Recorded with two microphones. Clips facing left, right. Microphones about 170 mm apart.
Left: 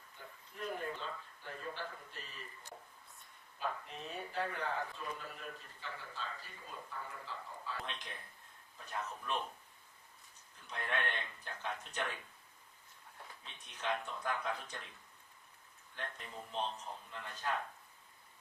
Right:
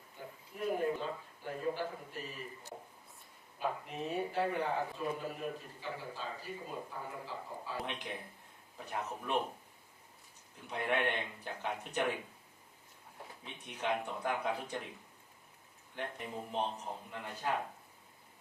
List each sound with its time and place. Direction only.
0.5 s a man's voice: 15° right (ahead or behind)
3.6 s a man's voice: 15° right (ahead or behind)
10.7 s a man's voice: 15° right (ahead or behind)
16.0 s a man's voice: 15° right (ahead or behind)